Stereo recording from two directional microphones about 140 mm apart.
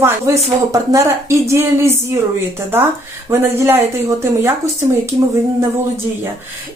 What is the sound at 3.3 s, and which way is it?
Speech, 20° right (ahead or behind).